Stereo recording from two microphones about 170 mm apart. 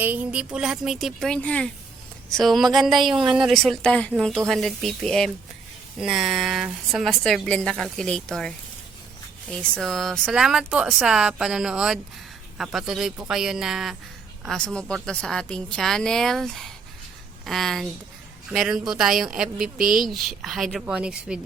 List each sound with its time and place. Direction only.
0.0 s a woman's voice: 10° right (ahead or behind)
19.8 s speech: 55° right (ahead or behind)
20.1 s a woman's voice: centre (ahead or behind)